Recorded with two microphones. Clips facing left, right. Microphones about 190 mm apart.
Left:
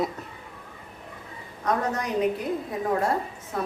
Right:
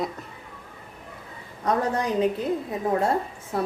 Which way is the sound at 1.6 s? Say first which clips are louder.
Right 2 dB; 30° right (ahead or behind).